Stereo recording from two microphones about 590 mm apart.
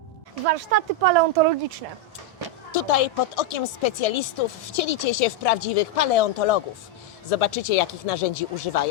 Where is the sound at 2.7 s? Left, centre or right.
Left.